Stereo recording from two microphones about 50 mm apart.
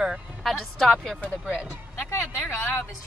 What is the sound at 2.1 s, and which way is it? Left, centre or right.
Speech, left.